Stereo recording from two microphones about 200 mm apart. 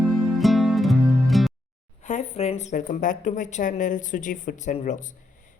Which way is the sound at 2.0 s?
35° left (ahead or behind).